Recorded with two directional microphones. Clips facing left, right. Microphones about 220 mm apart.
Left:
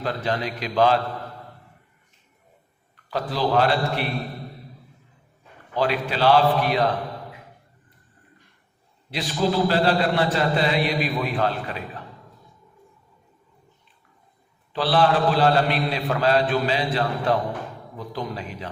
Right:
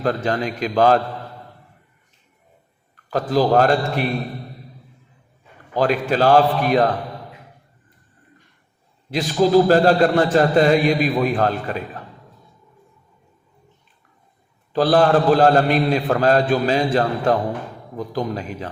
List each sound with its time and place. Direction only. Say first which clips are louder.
0.0 s a man's voice: right 5 dB; 45° right (ahead or behind)
2.9 s a man's voice: right 8 dB; 45° right (ahead or behind)
5.7 s a man's voice: right 5 dB; 45° right (ahead or behind)
9.1 s a man's voice: right 8 dB; 45° right (ahead or behind)
14.7 s a man's voice: right 5 dB; 45° right (ahead or behind)